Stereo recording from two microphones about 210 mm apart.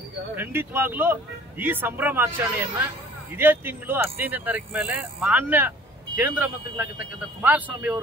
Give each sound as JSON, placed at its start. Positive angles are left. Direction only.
{"t": 0.4, "sound": "speech", "side_deg": -10}